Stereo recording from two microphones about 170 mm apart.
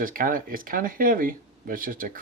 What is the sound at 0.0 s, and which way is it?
Speech, 55° right (ahead or behind).